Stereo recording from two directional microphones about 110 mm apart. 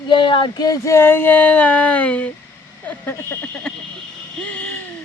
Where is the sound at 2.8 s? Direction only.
20° left (ahead or behind).